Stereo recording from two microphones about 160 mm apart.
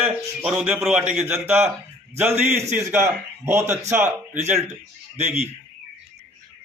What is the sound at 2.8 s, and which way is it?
Speech, 15° right (ahead or behind).